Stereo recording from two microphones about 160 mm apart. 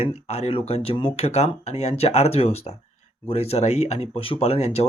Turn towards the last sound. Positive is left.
turn(degrees=40)  # may be behind; listen again after turning